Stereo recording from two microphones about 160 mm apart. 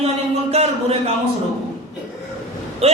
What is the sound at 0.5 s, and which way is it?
Speech, 40° right (ahead or behind).